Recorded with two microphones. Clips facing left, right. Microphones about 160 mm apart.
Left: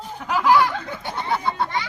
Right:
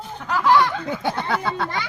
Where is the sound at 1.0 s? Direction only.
90° right.